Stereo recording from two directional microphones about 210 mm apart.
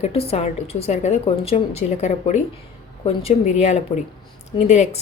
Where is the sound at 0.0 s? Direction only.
30° left (ahead or behind).